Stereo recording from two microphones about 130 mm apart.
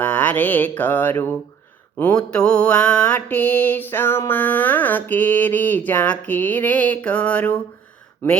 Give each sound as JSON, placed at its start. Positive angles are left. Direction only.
{"t": 0.0, "sound": "mantra", "side_deg": 10}